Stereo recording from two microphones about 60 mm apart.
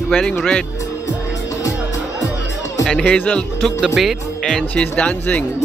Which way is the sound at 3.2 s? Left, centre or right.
Left.